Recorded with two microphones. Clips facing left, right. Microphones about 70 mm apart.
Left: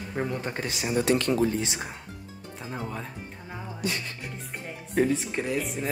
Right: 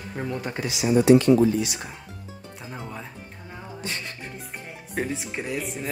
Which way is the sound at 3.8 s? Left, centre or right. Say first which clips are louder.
Left 3 dB; right.